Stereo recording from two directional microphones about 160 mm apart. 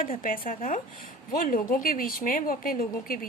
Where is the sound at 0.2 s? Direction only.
60° left (ahead or behind).